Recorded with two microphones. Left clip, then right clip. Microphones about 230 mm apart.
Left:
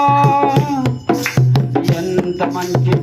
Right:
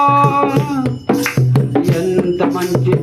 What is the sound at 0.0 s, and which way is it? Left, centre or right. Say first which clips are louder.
Music: even; centre.